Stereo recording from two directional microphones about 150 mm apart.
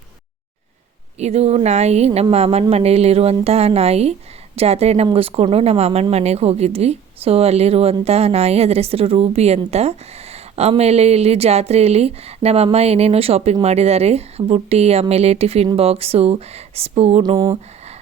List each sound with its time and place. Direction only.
1.2 s speech: 45° right (ahead or behind)